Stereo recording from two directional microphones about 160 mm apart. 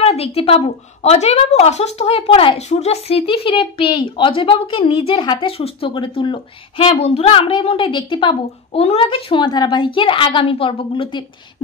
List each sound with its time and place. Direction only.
0.0 s a woman's voice: 40° left (ahead or behind)